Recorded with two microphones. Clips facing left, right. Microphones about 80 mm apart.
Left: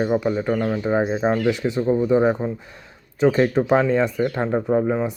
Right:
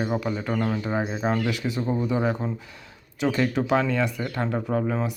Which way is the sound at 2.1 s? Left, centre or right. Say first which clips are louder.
Left 7 dB; left.